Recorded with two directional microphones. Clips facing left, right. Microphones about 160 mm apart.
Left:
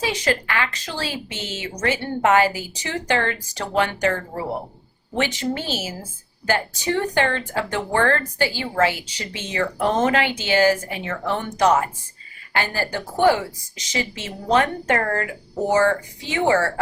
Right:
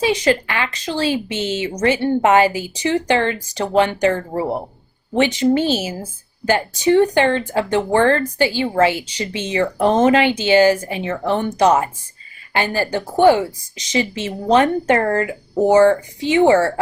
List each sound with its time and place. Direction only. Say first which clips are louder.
0.0 s speech: right 6 dB; 20° right (ahead or behind)